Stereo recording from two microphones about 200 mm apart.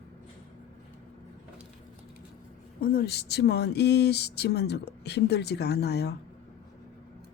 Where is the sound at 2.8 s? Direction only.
50° left (ahead or behind).